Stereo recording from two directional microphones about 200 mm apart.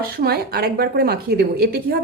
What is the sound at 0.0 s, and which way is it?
A woman's voice, 50° right (ahead or behind).